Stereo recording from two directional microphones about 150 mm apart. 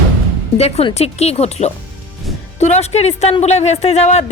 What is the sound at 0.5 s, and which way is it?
A woman's voice, 40° left (ahead or behind).